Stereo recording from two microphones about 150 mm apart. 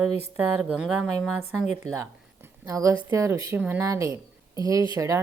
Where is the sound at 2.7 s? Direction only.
20° right (ahead or behind).